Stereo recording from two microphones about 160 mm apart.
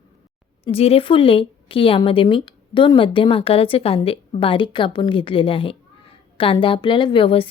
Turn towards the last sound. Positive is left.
turn(degrees=35)  # may be behind; listen again after turning